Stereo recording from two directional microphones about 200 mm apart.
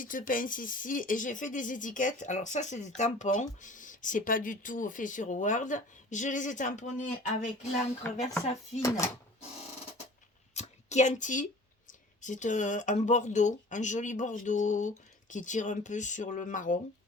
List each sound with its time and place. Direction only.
0.0 s speech: 45° left (ahead or behind)
8.8 s speech: 15° left (ahead or behind)
10.5 s a sound: 35° left (ahead or behind)
11.9 s speech: 40° left (ahead or behind)